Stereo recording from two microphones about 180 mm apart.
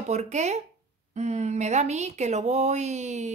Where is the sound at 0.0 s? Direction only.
40° right (ahead or behind).